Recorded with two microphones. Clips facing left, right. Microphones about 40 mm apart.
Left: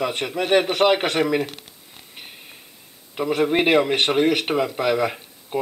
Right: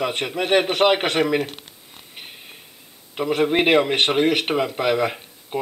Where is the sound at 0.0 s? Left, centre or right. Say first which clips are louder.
Even; centre.